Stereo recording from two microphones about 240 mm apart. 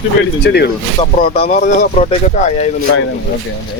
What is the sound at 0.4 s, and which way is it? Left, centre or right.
Speech, left.